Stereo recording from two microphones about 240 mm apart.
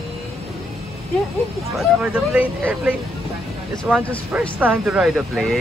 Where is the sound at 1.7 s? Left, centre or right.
Centre.